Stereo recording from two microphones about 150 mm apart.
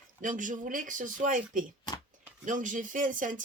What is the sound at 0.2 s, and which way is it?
Speech, 60° right (ahead or behind).